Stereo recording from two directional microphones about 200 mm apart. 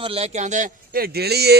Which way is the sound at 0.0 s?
30° right (ahead or behind).